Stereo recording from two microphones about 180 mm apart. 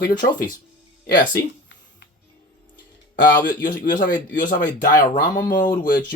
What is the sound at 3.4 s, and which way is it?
Speech, 50° left (ahead or behind).